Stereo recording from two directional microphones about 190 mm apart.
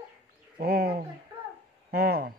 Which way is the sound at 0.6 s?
55° right (ahead or behind).